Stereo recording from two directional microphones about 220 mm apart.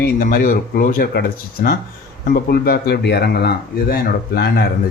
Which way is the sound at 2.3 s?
45° left (ahead or behind).